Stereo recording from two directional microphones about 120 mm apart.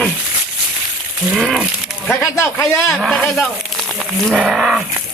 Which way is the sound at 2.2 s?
20° left (ahead or behind).